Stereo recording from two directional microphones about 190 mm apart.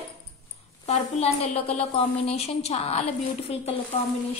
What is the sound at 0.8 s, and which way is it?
A woman's voice, 35° left (ahead or behind).